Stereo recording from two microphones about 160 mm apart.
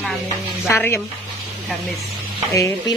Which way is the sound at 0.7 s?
15° left (ahead or behind).